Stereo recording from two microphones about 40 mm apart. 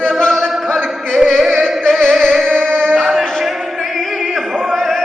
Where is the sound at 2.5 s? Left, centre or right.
Centre.